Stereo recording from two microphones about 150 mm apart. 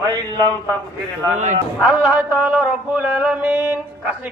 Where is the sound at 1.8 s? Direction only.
5° right (ahead or behind).